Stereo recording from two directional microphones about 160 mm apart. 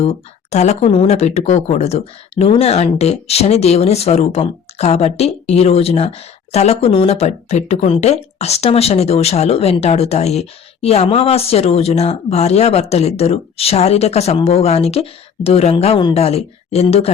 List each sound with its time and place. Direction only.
0.0 s speech: 40° left (ahead or behind)